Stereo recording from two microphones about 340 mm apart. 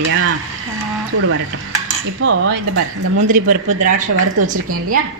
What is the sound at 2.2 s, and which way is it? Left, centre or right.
Speech, right.